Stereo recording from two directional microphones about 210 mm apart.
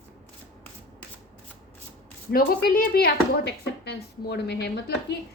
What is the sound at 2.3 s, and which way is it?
Speech, 45° left (ahead or behind).